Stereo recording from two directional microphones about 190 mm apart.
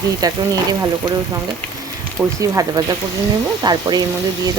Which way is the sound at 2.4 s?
20° right (ahead or behind).